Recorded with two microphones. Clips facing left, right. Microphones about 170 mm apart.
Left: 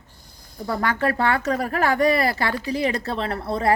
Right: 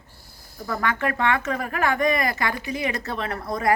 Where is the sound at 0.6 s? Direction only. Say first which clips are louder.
Left 3 dB; 30° left (ahead or behind).